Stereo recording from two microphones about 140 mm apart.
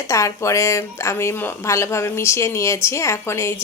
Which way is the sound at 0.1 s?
20° left (ahead or behind).